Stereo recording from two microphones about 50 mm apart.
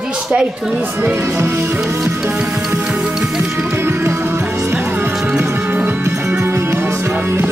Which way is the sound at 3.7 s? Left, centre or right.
Right.